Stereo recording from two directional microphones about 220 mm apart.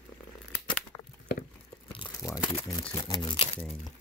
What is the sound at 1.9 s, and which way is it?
Crumpling, 20° left (ahead or behind).